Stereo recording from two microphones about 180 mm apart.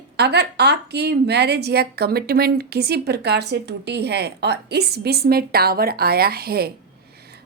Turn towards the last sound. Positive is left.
turn(degrees=-60)  # may be behind; listen again after turning